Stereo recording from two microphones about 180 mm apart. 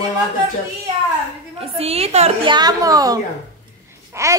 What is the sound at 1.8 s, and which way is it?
Speech, 35° right (ahead or behind).